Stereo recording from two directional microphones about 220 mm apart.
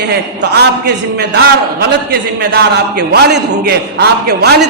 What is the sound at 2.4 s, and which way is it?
A man's voice, 45° right (ahead or behind).